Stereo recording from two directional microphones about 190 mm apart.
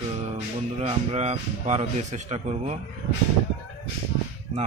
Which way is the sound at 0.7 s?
35° right (ahead or behind).